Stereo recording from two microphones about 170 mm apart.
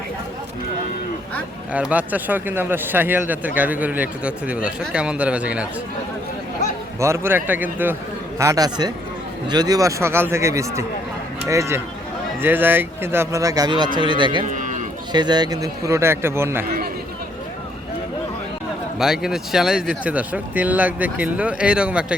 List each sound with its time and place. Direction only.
1.7 s speech: 10° right (ahead or behind)
7.0 s speech: 15° right (ahead or behind)
14.5 s a sound: 45° right (ahead or behind)
15.1 s speech: 25° right (ahead or behind)
18.9 s speech: centre (ahead or behind)